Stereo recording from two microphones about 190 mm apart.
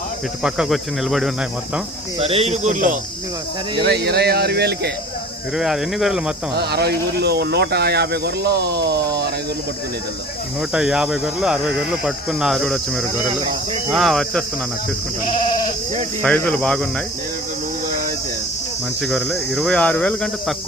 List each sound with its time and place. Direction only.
0.4 s speech: 5° right (ahead or behind)
2.1 s speech: 30° right (ahead or behind)
3.8 s speech: 60° right (ahead or behind)
5.5 s speech: centre (ahead or behind)
6.5 s speech: 60° right (ahead or behind)
10.6 s speech: 5° right (ahead or behind)
16.2 s speech: 5° left (ahead or behind)
19.0 s speech: centre (ahead or behind)